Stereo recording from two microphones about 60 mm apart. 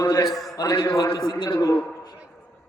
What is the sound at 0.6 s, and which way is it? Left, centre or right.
Speech, left.